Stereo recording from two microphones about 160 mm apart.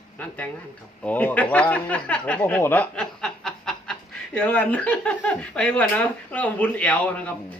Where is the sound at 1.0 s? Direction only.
10° left (ahead or behind).